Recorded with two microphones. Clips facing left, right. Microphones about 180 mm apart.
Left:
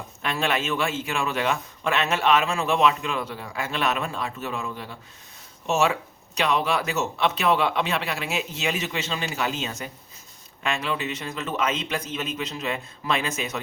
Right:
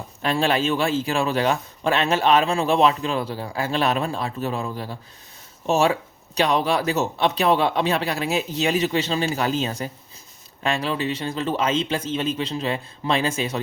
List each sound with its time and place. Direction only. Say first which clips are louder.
0.2 s speech: right 5 dB; 35° right (ahead or behind)